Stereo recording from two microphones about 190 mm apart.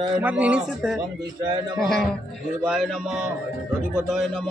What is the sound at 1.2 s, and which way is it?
Speech, 25° right (ahead or behind).